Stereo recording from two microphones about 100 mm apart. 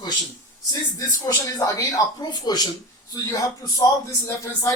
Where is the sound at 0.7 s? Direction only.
40° left (ahead or behind).